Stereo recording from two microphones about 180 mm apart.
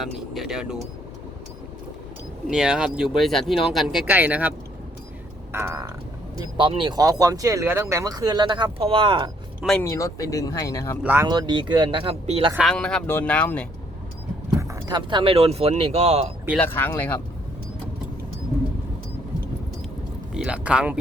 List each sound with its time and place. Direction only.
0.0 s speech: centre (ahead or behind)
2.5 s speech: 5° right (ahead or behind)
5.5 s a sound: 15° right (ahead or behind)
6.4 s speech: 30° right (ahead or behind)
9.6 s speech: 5° right (ahead or behind)
10.0 s speech: 20° left (ahead or behind)
11.0 s speech: 10° right (ahead or behind)
11.3 s speech: 25° right (ahead or behind)
12.5 s speech: 5° left (ahead or behind)
14.6 s speech: 20° right (ahead or behind); by 16.3 s 35° right (ahead or behind)
16.6 s speech: 10° left (ahead or behind)
20.3 s speech: 5° right (ahead or behind)